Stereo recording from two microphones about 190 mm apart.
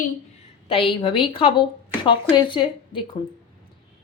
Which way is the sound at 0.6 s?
30° left (ahead or behind).